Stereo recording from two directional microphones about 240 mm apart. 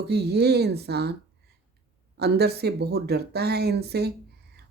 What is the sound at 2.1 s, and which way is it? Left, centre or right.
Speech, right.